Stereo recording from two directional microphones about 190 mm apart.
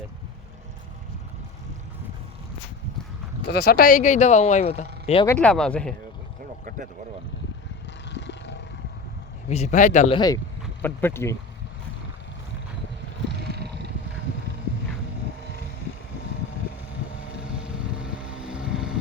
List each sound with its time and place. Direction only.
3.4 s speech: 60° left (ahead or behind); by 5.2 s 35° left (ahead or behind)
5.2 s speech: 10° left (ahead or behind)
6.7 s vehicle: 45° right (ahead or behind)
8.1 s vehicle: 70° left (ahead or behind)
9.5 s speech: 35° left (ahead or behind)
10.2 s speech: 20° left (ahead or behind)
13.3 s a sound: 60° right (ahead or behind)
17.9 s vehicle: 5° right (ahead or behind)